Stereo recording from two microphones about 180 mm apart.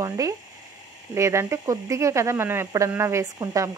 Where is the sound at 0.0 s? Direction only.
20° right (ahead or behind).